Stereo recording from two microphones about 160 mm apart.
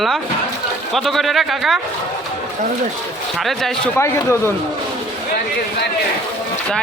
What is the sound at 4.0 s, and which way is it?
Speech, 15° left (ahead or behind).